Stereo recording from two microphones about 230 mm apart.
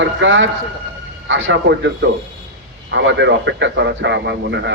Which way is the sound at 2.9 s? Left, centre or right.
Right.